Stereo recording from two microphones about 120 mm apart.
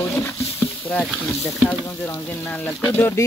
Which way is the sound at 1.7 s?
15° left (ahead or behind).